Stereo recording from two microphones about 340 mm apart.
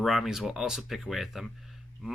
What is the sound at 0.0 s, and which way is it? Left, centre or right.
Speech, centre.